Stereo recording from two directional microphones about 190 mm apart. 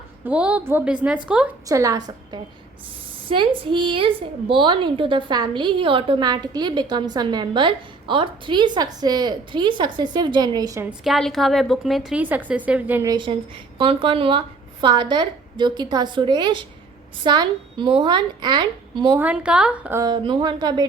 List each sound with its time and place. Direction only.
0.3 s a woman's voice: 5° right (ahead or behind)
1.6 s a woman's voice: 15° right (ahead or behind)
10.8 s a woman's voice: centre (ahead or behind); by 19.2 s 20° right (ahead or behind)
19.2 s a woman's voice: 5° right (ahead or behind); by 20.8 s 20° right (ahead or behind)